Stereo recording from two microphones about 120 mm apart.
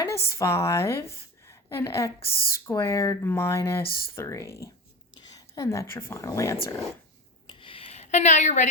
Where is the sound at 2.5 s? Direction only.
25° left (ahead or behind).